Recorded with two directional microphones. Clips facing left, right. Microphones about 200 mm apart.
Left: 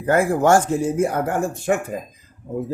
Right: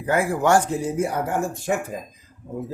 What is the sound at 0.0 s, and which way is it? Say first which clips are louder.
Speech: left 4 dB; 45° left (ahead or behind).